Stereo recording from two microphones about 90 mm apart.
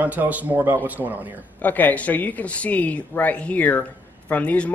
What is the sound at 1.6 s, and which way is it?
Speech, 20° left (ahead or behind).